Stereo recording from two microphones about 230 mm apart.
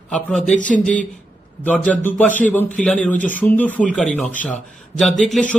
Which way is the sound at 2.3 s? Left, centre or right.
Left.